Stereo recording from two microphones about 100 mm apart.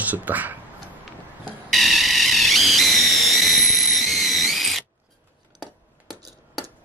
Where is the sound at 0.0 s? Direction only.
15° right (ahead or behind).